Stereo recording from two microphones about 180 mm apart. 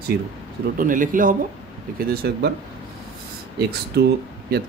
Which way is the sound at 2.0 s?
65° right (ahead or behind).